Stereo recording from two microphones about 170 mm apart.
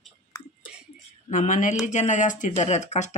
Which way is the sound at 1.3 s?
50° left (ahead or behind).